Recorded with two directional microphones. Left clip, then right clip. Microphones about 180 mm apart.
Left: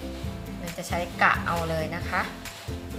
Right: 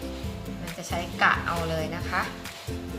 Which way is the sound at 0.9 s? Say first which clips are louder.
Left 1 dB; 25° left (ahead or behind).